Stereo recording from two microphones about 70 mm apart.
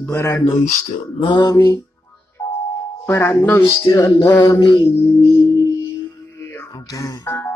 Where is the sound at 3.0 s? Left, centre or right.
Left.